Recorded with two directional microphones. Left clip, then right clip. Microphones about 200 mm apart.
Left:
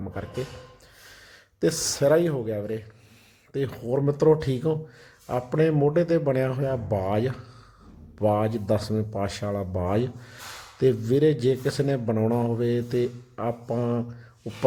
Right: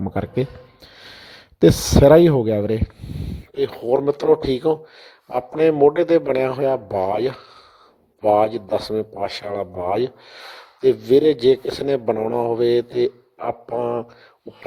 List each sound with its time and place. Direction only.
0.1 s a man's voice: 35° right (ahead or behind)
3.2 s a sound: 20° right (ahead or behind)
3.5 s a man's voice: 30° right (ahead or behind)